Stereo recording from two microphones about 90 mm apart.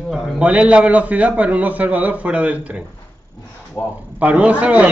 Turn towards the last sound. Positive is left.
turn(degrees=-15)  # may be behind; listen again after turning